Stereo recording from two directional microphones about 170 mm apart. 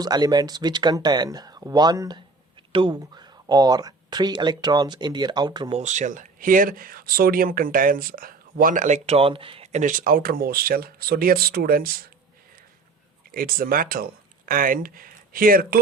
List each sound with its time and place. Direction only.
0.0 s speech: 25° right (ahead or behind)
5.7 s speech: 45° right (ahead or behind); by 12.1 s 60° right (ahead or behind)
13.3 s speech: 60° right (ahead or behind)